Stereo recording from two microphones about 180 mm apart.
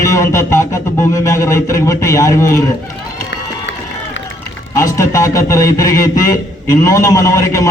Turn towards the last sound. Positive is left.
turn(degrees=15)  # may be behind; listen again after turning